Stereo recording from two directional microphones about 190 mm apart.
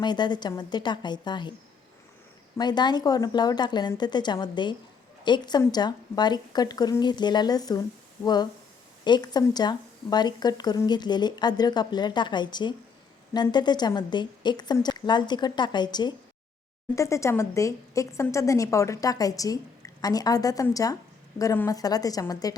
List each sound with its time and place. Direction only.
0.0 s speech: 25° left (ahead or behind)
2.6 s speech: 20° left (ahead or behind)